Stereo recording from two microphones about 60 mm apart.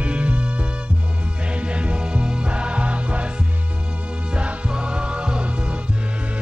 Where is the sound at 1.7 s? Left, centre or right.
Centre.